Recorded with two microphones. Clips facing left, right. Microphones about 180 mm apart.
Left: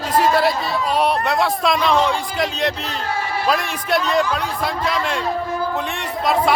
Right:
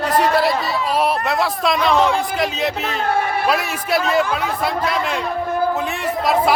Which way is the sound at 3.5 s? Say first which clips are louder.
Even; 5° right (ahead or behind).